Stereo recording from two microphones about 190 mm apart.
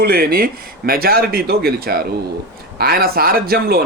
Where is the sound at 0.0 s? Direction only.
50° right (ahead or behind).